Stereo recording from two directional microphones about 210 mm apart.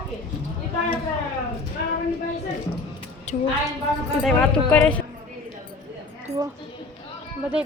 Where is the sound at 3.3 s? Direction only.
30° left (ahead or behind).